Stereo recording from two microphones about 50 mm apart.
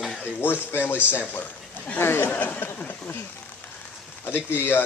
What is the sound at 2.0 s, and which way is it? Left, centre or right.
Speech, left.